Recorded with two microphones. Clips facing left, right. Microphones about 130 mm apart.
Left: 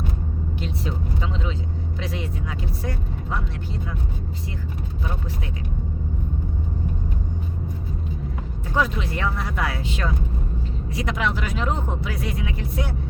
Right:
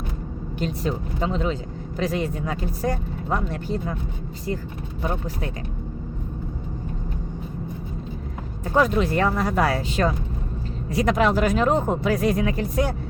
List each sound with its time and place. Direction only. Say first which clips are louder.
0.6 s speech: right 6 dB; 45° right (ahead or behind)
8.7 s speech: right 5 dB; 45° right (ahead or behind)